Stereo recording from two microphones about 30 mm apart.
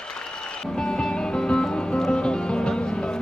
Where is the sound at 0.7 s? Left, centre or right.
Left.